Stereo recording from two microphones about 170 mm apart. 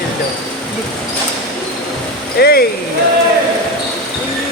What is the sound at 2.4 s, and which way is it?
Speech, 65° left (ahead or behind).